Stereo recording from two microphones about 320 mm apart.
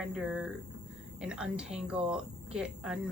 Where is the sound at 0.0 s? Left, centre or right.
Centre.